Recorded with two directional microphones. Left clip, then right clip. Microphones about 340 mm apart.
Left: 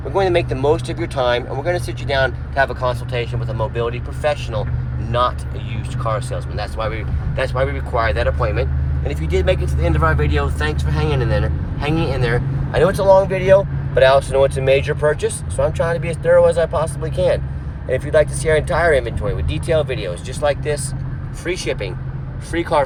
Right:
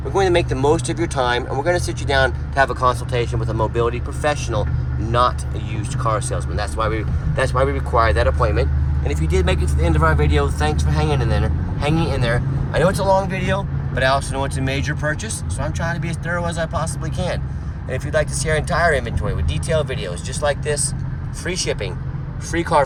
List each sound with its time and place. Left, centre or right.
0.1 s speech: centre
6.0 s speech: centre